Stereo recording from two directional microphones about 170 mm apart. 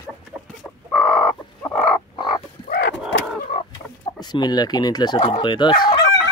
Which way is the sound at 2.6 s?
70° left (ahead or behind).